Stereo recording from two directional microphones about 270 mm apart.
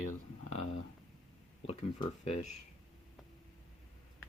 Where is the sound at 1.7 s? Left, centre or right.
Left.